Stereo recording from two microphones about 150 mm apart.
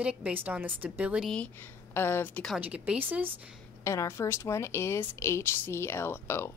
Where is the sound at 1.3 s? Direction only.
10° left (ahead or behind).